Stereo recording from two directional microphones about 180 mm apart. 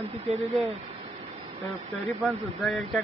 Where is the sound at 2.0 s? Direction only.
Centre (ahead or behind).